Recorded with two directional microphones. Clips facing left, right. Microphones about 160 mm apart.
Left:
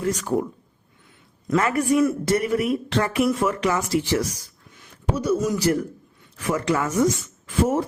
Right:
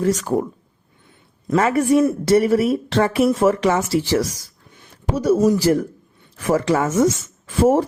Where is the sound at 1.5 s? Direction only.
25° right (ahead or behind).